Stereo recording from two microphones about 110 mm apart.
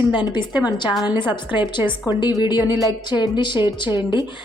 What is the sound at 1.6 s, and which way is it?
Speech, 20° right (ahead or behind).